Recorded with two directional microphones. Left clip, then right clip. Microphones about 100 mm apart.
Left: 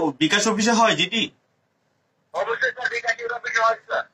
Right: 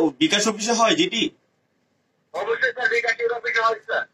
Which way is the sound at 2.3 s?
35° left (ahead or behind).